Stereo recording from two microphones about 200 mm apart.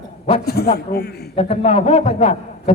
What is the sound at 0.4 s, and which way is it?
Speech, 50° left (ahead or behind).